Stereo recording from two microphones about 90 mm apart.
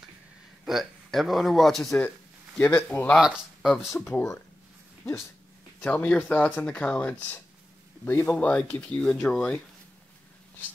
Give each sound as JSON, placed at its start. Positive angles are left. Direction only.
{"t": 0.7, "sound": "a man's voice", "side_deg": 0}
{"t": 2.5, "sound": "a man's voice", "side_deg": 20}
{"t": 3.2, "sound": "a man's voice", "side_deg": 0}
{"t": 4.0, "sound": "a man's voice", "side_deg": 20}
{"t": 5.8, "sound": "speech", "side_deg": 15}